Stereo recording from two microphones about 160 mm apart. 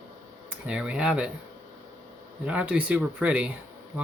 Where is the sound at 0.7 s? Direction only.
5° right (ahead or behind).